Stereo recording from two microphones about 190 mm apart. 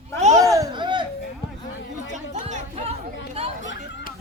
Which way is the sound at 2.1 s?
40° right (ahead or behind).